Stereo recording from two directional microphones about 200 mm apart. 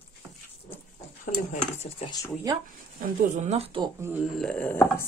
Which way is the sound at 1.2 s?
40° left (ahead or behind).